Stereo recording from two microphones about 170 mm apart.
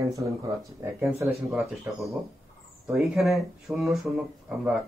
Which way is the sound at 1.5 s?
Centre (ahead or behind).